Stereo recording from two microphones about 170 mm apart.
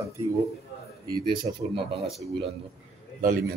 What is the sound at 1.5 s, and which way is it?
Speech, 45° right (ahead or behind).